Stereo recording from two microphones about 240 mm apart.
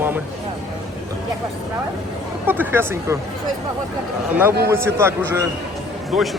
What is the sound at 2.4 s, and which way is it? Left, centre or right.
Speech, centre.